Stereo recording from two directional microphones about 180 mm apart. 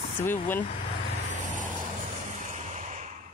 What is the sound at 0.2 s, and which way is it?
Speech, 10° left (ahead or behind).